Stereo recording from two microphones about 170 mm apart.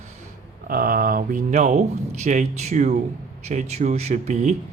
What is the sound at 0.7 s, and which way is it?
Speech, 60° right (ahead or behind).